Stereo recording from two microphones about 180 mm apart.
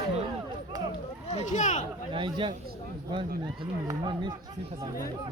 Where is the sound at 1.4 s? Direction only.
45° left (ahead or behind).